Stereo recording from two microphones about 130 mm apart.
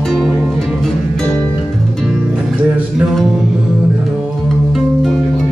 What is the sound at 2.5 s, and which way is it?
Music, 10° right (ahead or behind).